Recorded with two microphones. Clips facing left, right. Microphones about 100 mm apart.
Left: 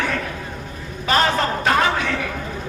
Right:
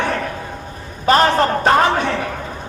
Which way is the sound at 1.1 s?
40° right (ahead or behind).